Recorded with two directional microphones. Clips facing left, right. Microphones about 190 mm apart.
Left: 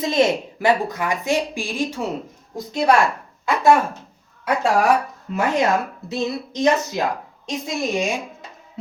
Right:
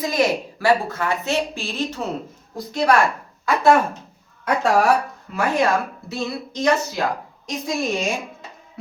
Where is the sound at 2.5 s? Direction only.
20° left (ahead or behind).